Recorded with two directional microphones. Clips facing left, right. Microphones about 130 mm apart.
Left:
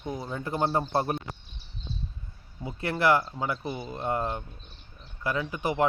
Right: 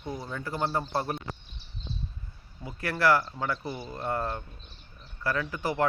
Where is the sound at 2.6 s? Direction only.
20° left (ahead or behind).